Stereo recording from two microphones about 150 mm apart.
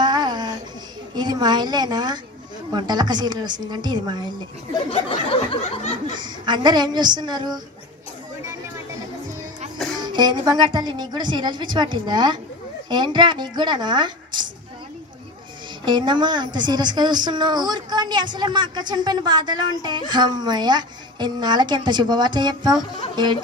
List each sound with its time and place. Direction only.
0.0 s a sound: 30° right (ahead or behind)
1.1 s a woman's voice: 30° right (ahead or behind)
4.8 s a sound: 40° left (ahead or behind)
6.1 s a woman's voice: 30° right (ahead or behind)
10.0 s a woman's voice: 30° right (ahead or behind)
15.8 s a woman's voice: 30° right (ahead or behind)